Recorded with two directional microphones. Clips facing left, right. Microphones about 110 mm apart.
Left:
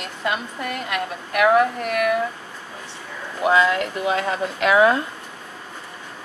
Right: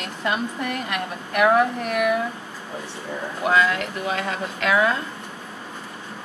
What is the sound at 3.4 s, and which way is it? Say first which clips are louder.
Speech: left 3 dB; 15° left (ahead or behind).